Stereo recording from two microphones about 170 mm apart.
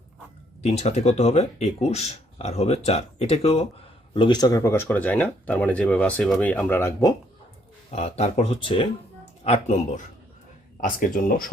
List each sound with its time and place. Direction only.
0.6 s speech: 40° left (ahead or behind)
4.1 s speech: 25° left (ahead or behind)
7.9 s speech: 40° left (ahead or behind); by 11.5 s 55° left (ahead or behind)